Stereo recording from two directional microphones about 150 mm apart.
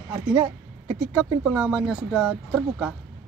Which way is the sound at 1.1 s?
5° right (ahead or behind).